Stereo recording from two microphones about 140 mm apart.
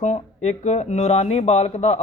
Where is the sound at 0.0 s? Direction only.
55° left (ahead or behind).